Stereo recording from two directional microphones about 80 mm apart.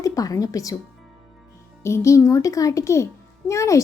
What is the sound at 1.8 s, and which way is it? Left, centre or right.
A child's voice, left.